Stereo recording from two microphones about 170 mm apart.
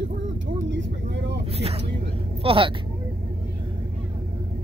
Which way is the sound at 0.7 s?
90° right.